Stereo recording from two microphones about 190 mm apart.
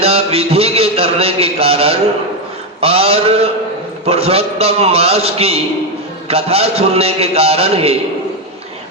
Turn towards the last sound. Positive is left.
turn(degrees=-30)  # may be behind; listen again after turning